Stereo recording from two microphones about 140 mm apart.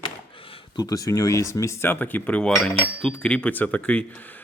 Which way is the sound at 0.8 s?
25° left (ahead or behind).